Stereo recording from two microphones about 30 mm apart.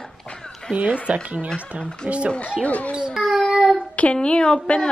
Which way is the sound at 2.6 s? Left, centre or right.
Left.